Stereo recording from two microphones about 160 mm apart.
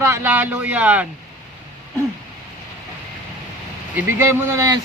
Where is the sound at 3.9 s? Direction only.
15° right (ahead or behind).